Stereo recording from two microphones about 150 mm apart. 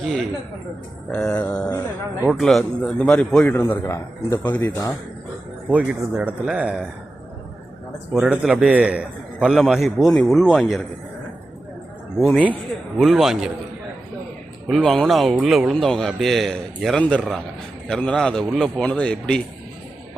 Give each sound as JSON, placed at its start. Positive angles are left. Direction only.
{"t": 0.0, "sound": "a man's voice", "side_deg": 5}
{"t": 5.6, "sound": "speech", "side_deg": -5}
{"t": 8.1, "sound": "a man's voice", "side_deg": -5}
{"t": 13.0, "sound": "a man's voice", "side_deg": 0}
{"t": 14.7, "sound": "a man's voice", "side_deg": 5}